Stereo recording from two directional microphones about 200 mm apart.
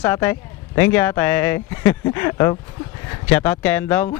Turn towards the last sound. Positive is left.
turn(degrees=10)  # may be behind; listen again after turning